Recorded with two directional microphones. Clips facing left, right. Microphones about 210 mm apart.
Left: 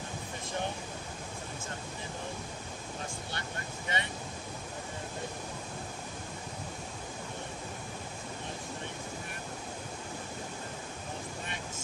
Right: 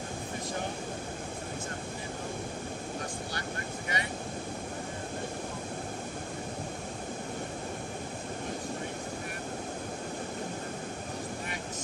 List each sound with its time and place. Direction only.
3.9 s vehicle: 25° left (ahead or behind)